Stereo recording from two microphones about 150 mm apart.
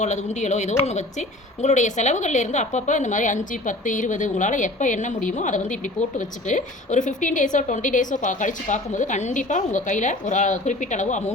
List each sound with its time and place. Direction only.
0.0 s a woman's voice: 50° left (ahead or behind)